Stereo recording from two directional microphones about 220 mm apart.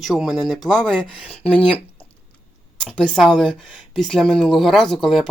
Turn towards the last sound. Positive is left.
turn(degrees=0)  # may be behind; listen again after turning